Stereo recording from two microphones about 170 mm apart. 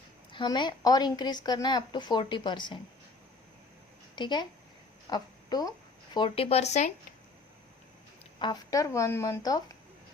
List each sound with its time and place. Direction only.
0.3 s a woman's voice: 25° left (ahead or behind)
4.1 s a woman's voice: 25° left (ahead or behind)
8.4 s a woman's voice: 25° left (ahead or behind)